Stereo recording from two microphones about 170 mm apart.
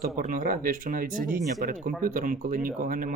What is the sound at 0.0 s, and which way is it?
A man's voice, 50° right (ahead or behind).